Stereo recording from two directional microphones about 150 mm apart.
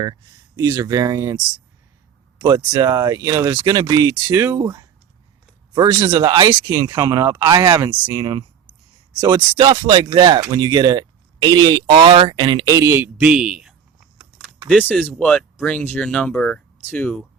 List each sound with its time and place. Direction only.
0.0 s speech: 25° right (ahead or behind)
2.4 s speech: 30° right (ahead or behind)
13.3 s a sound: 5° right (ahead or behind)
14.7 s speech: 10° left (ahead or behind)